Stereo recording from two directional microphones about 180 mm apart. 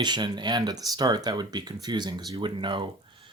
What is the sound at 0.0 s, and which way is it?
Speech, 25° right (ahead or behind).